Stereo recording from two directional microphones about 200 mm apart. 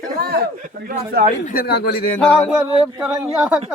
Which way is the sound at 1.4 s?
50° left (ahead or behind).